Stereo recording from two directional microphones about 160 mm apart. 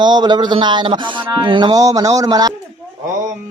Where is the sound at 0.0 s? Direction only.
25° right (ahead or behind).